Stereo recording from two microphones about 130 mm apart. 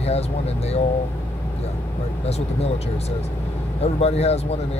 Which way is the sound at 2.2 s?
55° left (ahead or behind).